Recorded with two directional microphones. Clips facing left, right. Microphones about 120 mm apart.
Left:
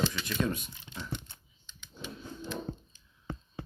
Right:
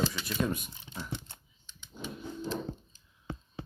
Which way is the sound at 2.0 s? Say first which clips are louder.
Right 4 dB; 40° right (ahead or behind).